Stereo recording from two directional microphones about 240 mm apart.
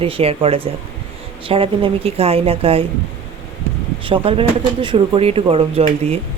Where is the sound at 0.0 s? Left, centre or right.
Right.